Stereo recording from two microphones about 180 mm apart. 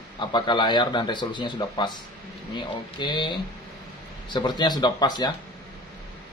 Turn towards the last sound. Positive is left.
turn(degrees=25)  # may be behind; listen again after turning